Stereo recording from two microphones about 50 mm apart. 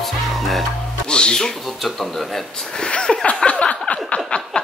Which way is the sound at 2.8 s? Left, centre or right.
Centre.